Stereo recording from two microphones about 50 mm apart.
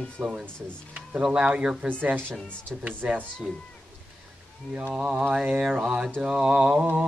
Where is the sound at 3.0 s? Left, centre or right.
Right.